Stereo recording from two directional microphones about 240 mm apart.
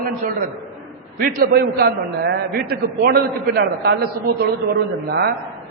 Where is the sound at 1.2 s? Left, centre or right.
Right.